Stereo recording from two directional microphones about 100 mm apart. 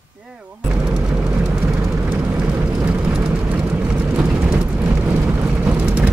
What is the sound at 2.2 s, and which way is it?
Vehicle, 15° right (ahead or behind).